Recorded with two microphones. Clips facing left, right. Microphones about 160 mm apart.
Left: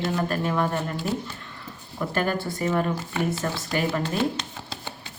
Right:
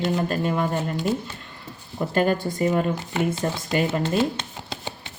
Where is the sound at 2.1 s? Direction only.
20° right (ahead or behind).